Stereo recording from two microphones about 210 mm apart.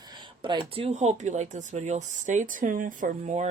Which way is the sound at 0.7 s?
30° right (ahead or behind).